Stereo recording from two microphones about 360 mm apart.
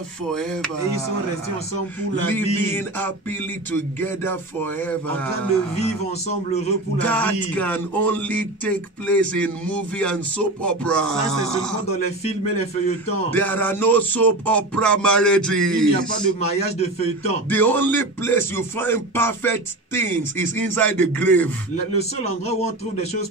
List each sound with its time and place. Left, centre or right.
0.3 s music: centre
2.3 s music: centre
7.0 s music: centre
13.3 s music: centre
16.2 s a man's voice: centre
17.5 s music: centre
21.9 s a man's voice: centre